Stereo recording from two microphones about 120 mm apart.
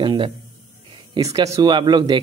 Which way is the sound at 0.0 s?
45° right (ahead or behind).